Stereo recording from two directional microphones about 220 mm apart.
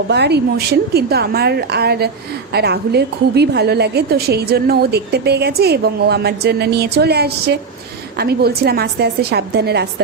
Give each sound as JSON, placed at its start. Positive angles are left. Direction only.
{"t": 0.1, "sound": "a woman's voice", "side_deg": -50}